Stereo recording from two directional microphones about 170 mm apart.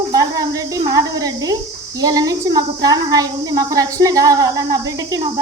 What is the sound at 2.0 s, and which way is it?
Speech, 20° right (ahead or behind).